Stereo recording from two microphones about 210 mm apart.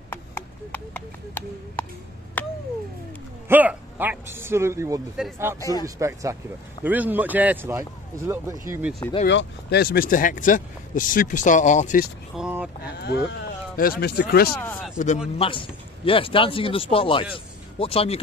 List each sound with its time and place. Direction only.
0.1 s speech: 10° left (ahead or behind)
2.4 s a sound: 10° left (ahead or behind)
3.4 s a man's voice: 10° right (ahead or behind)
5.6 s a man's voice: 15° left (ahead or behind)
5.9 s a man's voice: 15° right (ahead or behind)
9.3 s speech: 55° left (ahead or behind); by 12.1 s 35° left (ahead or behind)
12.4 s vehicle: 5° right (ahead or behind)
13.0 s speech: 50° left (ahead or behind)
14.6 s speech: 10° left (ahead or behind)
15.3 s speech: 25° left (ahead or behind)